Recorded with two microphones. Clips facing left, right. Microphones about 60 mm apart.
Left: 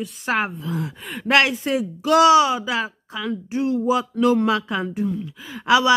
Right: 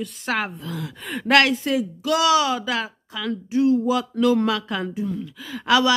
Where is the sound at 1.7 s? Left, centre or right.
Left.